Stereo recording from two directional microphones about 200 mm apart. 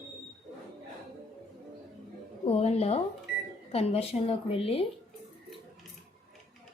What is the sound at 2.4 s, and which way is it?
A woman's voice, 30° left (ahead or behind).